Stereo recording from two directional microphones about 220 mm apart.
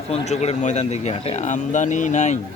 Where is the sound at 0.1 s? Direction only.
30° left (ahead or behind).